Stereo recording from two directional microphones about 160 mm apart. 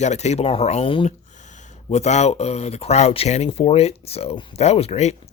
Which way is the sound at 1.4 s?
50° left (ahead or behind).